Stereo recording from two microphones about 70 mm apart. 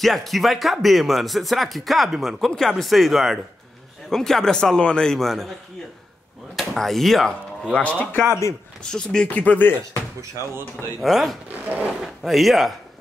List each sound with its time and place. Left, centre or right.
0.0 s a man's voice: centre
6.5 s speech: centre
7.7 s a man's voice: centre
8.9 s a man's voice: centre
9.3 s a man's voice: left
11.0 s speech: centre
11.6 s speech: right
12.0 s speech: centre